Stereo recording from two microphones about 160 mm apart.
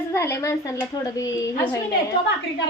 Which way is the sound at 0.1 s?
15° left (ahead or behind).